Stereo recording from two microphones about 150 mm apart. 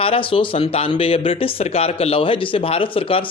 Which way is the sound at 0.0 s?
40° left (ahead or behind).